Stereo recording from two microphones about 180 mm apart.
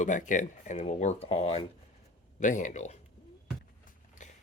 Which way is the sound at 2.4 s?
45° left (ahead or behind).